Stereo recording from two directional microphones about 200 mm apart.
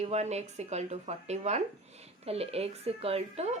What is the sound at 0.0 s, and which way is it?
A woman's voice, 35° right (ahead or behind).